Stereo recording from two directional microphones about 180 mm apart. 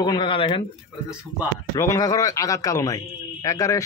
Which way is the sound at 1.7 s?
20° left (ahead or behind).